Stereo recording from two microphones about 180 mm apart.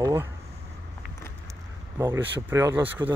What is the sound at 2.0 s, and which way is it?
Speech, 15° right (ahead or behind).